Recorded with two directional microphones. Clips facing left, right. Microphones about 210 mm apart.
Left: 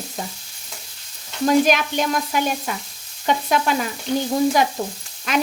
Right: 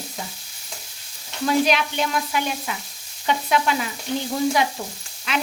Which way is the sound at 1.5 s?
45° left (ahead or behind).